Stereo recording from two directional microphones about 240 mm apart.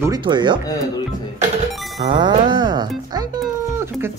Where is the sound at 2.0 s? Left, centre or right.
Right.